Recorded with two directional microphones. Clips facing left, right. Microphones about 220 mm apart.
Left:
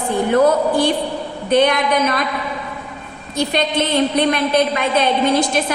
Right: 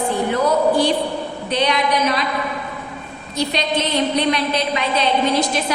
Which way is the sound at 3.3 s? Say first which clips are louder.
Left 3 dB; 50° left (ahead or behind).